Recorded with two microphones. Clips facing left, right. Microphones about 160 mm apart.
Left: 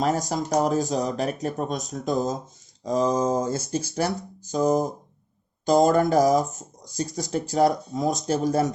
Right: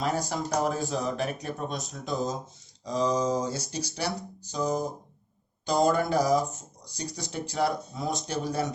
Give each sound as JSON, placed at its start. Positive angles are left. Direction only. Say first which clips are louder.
{"t": 0.0, "sound": "speech", "louder": "left 5 dB", "side_deg": 45}